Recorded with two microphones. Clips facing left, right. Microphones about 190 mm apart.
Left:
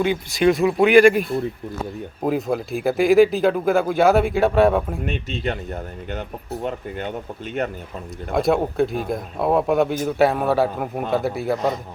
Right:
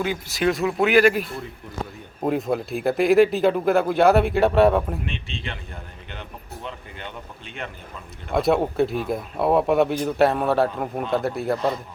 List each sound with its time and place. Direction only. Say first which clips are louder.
0.0 s speech: left 5 dB; centre (ahead or behind)
2.2 s speech: left 1 dB; centre (ahead or behind)
5.0 s speech: left 7 dB; 40° left (ahead or behind)
8.3 s speech: left 1 dB; centre (ahead or behind)